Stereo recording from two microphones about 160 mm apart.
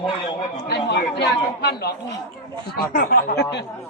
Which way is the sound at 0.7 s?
90° left.